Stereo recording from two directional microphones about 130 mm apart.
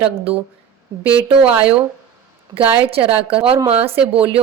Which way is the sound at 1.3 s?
45° right (ahead or behind).